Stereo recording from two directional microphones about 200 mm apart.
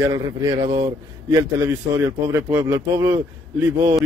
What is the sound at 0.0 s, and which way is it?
A man's voice, 15° right (ahead or behind).